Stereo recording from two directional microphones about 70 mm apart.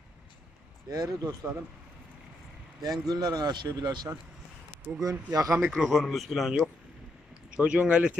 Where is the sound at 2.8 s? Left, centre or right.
Right.